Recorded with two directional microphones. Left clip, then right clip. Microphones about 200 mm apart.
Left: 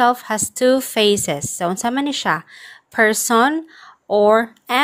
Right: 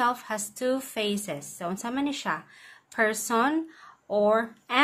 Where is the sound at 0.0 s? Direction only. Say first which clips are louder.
Left 10 dB; 35° left (ahead or behind).